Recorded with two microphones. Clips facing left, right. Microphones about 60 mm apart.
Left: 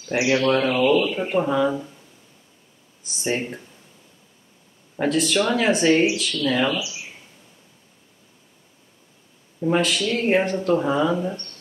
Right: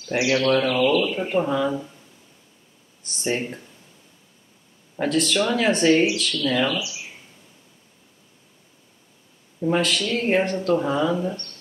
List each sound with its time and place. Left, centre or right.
0.1 s speech: centre
3.0 s speech: centre
4.9 s speech: centre
9.6 s speech: centre